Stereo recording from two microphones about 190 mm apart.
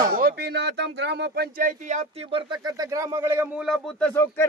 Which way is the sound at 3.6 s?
5° left (ahead or behind).